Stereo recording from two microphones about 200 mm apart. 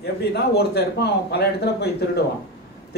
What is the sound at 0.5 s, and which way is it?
A man's voice, 55° left (ahead or behind).